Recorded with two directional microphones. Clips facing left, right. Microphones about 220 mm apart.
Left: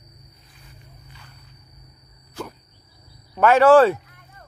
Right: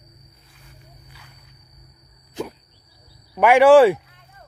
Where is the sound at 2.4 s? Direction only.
20° right (ahead or behind).